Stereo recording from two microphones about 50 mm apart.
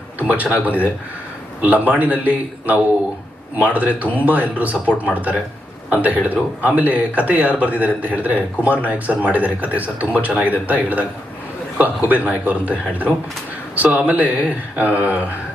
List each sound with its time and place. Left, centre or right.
0.2 s a man's voice: right
1.6 s speech: right